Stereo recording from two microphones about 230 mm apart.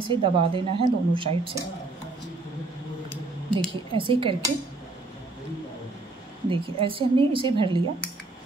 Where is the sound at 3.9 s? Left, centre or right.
Right.